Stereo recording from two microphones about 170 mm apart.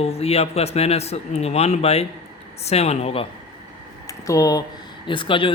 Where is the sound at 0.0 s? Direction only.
35° left (ahead or behind).